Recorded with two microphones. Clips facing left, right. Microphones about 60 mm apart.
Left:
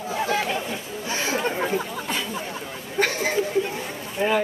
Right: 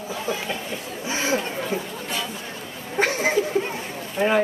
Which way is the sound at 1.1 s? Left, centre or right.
Centre.